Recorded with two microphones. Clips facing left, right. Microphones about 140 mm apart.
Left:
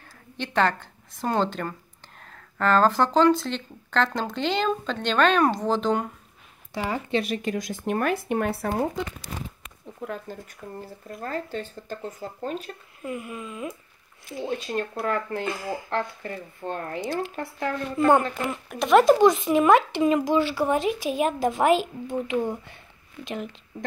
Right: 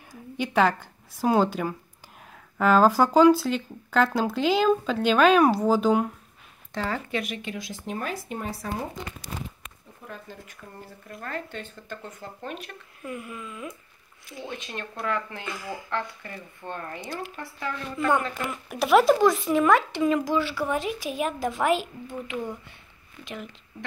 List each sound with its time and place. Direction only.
0.1 s speech: 10° right (ahead or behind)
6.7 s speech: 15° left (ahead or behind)
7.1 s speech: 30° left (ahead or behind)
7.8 s speech: 60° left (ahead or behind)
10.0 s speech: 60° left (ahead or behind)
11.1 s speech: 35° left (ahead or behind)
13.3 s speech: 20° left (ahead or behind)
14.3 s speech: 35° left (ahead or behind)
15.5 s speech: 35° left (ahead or behind)
15.9 s speech: 45° left (ahead or behind)
17.4 s speech: 55° left (ahead or behind)
17.9 s speech: 35° left (ahead or behind)
18.7 s speech: 5° right (ahead or behind)
19.1 s speech: 20° left (ahead or behind)